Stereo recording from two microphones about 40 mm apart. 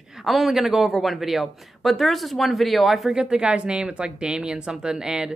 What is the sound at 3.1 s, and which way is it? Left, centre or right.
A woman's voice, right.